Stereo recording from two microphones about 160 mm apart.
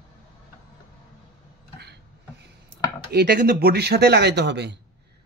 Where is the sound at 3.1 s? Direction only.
75° right (ahead or behind).